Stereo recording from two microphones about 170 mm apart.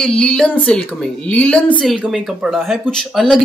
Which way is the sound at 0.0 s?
5° left (ahead or behind).